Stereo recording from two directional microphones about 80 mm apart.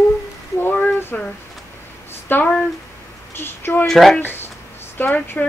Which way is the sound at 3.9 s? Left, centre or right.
Centre.